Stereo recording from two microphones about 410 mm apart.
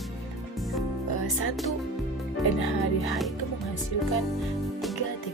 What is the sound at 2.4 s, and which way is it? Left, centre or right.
Music, left.